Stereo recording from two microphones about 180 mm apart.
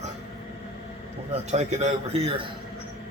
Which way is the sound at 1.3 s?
40° right (ahead or behind).